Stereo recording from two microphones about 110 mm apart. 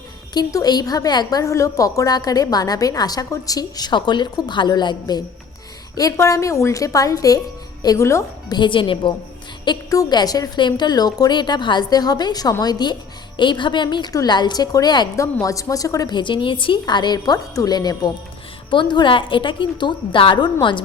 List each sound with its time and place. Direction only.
0.3 s a woman's voice: 40° left (ahead or behind)
8.5 s a woman's voice: 45° left (ahead or behind)
9.9 s a woman's voice: 35° left (ahead or behind)